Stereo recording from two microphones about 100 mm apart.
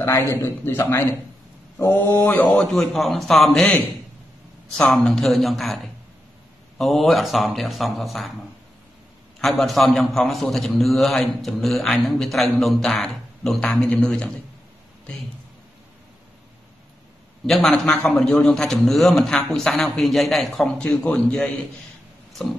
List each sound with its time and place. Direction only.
0.0 s a man's voice: 30° left (ahead or behind)
2.4 s a man's voice: 5° left (ahead or behind)
6.8 s a man's voice: centre (ahead or behind)
9.4 s a man's voice: centre (ahead or behind)
17.5 s a man's voice: 5° left (ahead or behind)